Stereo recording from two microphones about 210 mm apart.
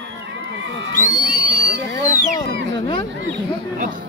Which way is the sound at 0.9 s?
40° left (ahead or behind).